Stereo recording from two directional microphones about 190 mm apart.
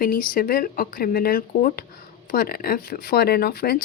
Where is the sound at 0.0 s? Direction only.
45° left (ahead or behind).